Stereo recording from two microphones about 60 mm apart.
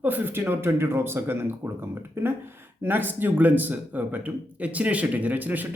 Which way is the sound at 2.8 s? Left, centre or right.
Right.